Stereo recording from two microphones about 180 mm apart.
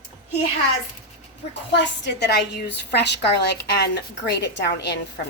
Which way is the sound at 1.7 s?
75° left (ahead or behind).